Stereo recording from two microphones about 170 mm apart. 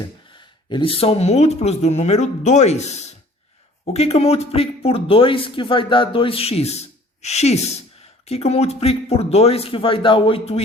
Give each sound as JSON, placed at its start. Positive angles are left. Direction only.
{"t": 0.3, "sound": "speech", "side_deg": 30}